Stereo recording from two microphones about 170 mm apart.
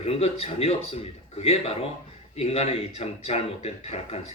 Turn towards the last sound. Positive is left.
turn(degrees=35)  # may be behind; listen again after turning